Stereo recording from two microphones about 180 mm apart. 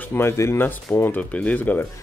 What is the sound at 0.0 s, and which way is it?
Speech, 15° left (ahead or behind).